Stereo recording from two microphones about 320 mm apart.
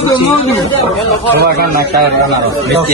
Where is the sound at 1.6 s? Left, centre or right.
Right.